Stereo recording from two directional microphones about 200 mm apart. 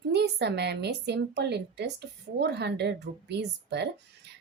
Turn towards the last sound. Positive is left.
turn(degrees=-55)  # may be behind; listen again after turning